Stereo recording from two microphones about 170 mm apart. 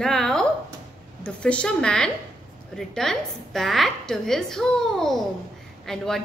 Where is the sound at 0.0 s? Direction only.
5° left (ahead or behind).